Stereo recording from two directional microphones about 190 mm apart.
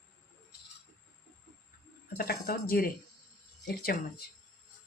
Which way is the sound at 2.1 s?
50° left (ahead or behind).